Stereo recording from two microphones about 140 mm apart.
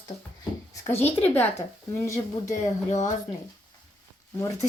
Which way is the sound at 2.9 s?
60° left (ahead or behind).